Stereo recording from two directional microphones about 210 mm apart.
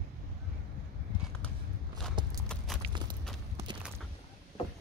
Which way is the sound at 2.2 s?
20° right (ahead or behind).